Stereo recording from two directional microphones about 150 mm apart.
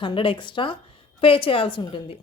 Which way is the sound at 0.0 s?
35° left (ahead or behind).